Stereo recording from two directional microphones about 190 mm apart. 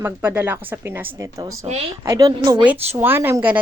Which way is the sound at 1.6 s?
35° right (ahead or behind).